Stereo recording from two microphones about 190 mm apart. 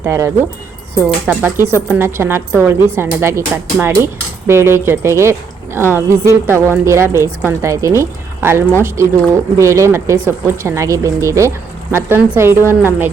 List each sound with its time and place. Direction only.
0.0 s speech: 15° right (ahead or behind)